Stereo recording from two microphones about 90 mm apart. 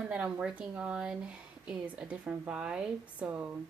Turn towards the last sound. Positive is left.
turn(degrees=-15)  # may be behind; listen again after turning